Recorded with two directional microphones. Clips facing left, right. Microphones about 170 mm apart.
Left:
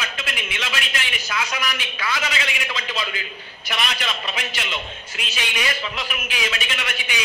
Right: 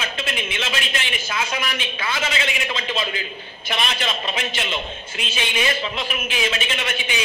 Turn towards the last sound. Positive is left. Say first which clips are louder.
# right 3 dB
turn(degrees=-25)  # may be behind; listen again after turning